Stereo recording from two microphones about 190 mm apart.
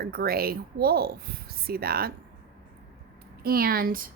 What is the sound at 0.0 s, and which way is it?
A woman's voice, 55° right (ahead or behind).